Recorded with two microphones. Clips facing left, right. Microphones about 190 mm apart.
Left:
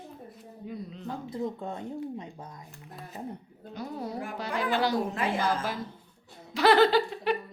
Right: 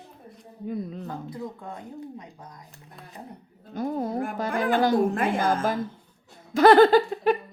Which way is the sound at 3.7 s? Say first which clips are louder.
Right 8 dB; 50° right (ahead or behind).